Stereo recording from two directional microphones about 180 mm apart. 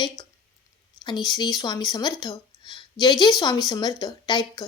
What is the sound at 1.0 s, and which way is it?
A woman's voice, 25° left (ahead or behind).